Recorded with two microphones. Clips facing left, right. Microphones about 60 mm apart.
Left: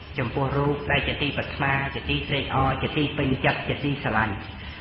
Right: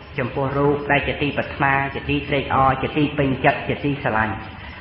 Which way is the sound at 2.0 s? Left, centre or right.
Right.